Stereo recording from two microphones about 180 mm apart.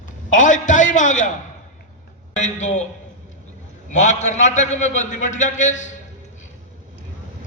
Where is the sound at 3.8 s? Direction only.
40° left (ahead or behind).